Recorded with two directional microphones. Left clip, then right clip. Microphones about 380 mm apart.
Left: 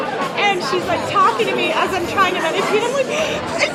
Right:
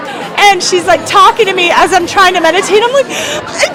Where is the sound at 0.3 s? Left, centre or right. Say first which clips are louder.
Right 12 dB; right.